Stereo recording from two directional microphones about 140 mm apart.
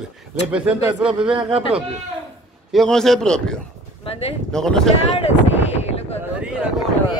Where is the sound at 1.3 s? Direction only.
45° right (ahead or behind).